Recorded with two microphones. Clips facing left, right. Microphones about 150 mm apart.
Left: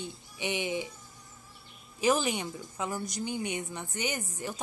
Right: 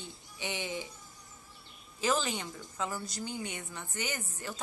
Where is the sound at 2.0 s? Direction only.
15° left (ahead or behind).